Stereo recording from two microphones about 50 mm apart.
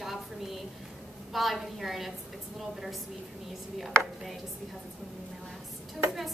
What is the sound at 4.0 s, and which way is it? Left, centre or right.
Speech, centre.